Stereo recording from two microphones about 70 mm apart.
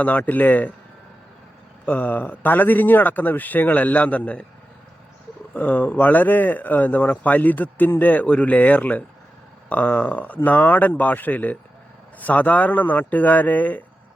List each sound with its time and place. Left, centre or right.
0.0 s speech: left
1.8 s speech: left
5.5 s speech: left